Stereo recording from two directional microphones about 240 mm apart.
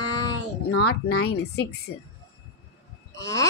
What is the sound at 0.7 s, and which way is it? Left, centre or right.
Speech, left.